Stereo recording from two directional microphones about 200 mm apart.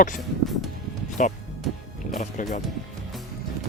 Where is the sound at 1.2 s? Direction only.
40° left (ahead or behind).